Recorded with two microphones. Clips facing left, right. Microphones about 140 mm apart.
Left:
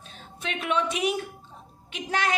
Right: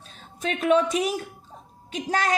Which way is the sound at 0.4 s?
40° right (ahead or behind).